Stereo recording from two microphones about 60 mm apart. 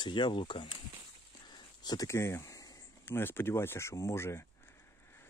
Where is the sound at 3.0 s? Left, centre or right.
Left.